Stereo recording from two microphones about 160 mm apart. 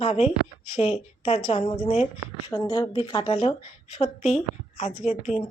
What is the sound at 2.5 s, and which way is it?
A woman's voice, 25° left (ahead or behind).